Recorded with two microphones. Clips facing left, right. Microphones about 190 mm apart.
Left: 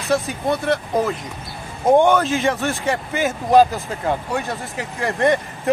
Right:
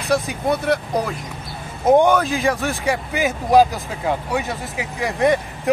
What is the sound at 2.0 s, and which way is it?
Speech, centre (ahead or behind).